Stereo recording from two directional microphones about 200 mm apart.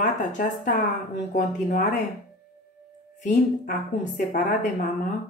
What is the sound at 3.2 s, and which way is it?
A woman's voice, 40° left (ahead or behind).